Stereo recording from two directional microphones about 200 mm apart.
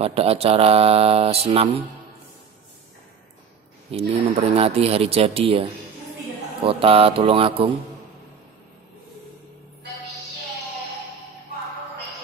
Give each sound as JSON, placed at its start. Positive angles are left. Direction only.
{"t": 0.0, "sound": "speech", "side_deg": -30}
{"t": 3.9, "sound": "speech", "side_deg": -30}